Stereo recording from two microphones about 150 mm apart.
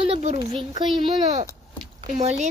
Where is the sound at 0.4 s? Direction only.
35° right (ahead or behind).